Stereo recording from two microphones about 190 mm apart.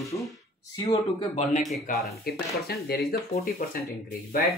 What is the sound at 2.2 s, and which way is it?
Speech, 55° left (ahead or behind).